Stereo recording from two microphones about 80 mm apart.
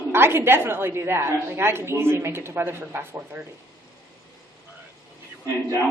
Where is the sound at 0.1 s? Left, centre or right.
Right.